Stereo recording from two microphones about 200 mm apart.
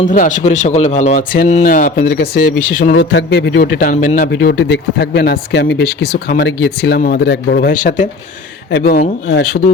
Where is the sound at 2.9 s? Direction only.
65° left (ahead or behind).